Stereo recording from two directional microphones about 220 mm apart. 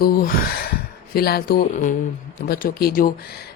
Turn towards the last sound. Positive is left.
turn(degrees=40)  # may be behind; listen again after turning